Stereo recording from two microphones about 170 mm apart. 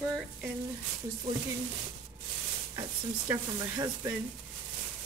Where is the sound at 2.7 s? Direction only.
20° right (ahead or behind).